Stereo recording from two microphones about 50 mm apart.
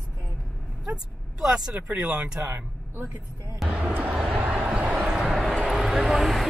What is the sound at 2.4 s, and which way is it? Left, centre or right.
Speech, right.